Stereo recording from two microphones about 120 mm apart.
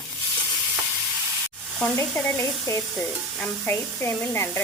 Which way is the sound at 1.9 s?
20° left (ahead or behind).